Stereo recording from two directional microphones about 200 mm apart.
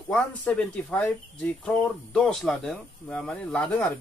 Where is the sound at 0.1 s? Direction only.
5° left (ahead or behind).